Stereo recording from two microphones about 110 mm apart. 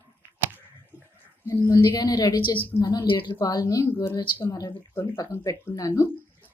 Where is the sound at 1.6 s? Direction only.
35° left (ahead or behind).